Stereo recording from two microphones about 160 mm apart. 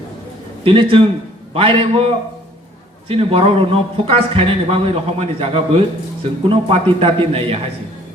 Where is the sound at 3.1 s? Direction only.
35° right (ahead or behind).